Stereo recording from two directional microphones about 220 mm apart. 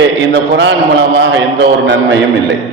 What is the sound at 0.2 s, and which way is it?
A man's voice, 55° right (ahead or behind).